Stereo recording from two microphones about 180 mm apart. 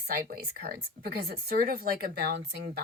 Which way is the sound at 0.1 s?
55° right (ahead or behind).